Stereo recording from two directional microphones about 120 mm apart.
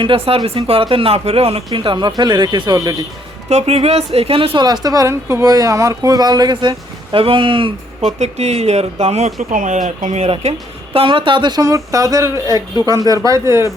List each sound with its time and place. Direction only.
0.0 s speech: 45° right (ahead or behind)
3.5 s a woman's voice: 60° right (ahead or behind); by 7.7 s 45° right (ahead or behind)
8.2 s speech: 65° right (ahead or behind); by 10.2 s 90° right
10.2 s speech: 55° right (ahead or behind); by 13.7 s 25° right (ahead or behind)